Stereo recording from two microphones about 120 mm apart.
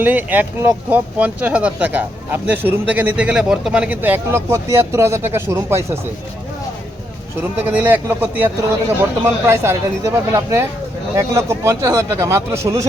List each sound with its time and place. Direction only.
0.0 s speech: 15° right (ahead or behind)
7.7 s speech: 15° right (ahead or behind)